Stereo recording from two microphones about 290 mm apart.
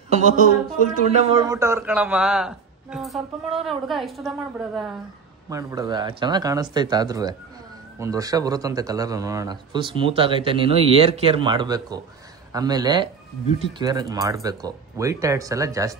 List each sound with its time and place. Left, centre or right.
0.1 s speech: right
1.5 s a man's voice: centre